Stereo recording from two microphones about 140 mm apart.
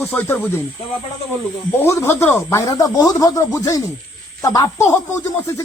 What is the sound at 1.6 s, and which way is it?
Speech, 15° left (ahead or behind).